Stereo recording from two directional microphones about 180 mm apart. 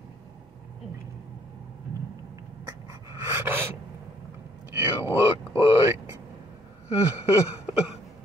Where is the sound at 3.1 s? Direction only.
10° right (ahead or behind).